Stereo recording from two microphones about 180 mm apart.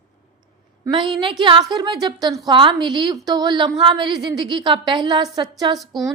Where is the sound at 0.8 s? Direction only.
25° right (ahead or behind).